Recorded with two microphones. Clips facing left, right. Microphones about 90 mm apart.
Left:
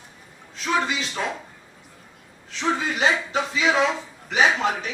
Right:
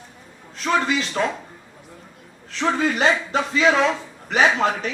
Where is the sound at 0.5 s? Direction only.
50° right (ahead or behind).